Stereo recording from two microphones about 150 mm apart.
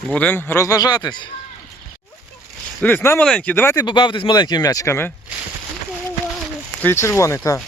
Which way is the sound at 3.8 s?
30° left (ahead or behind).